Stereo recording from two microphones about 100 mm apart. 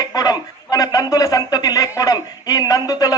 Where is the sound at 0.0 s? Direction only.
40° left (ahead or behind).